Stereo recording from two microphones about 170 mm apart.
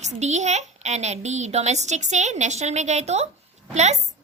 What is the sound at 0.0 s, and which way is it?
A woman's voice, 40° right (ahead or behind).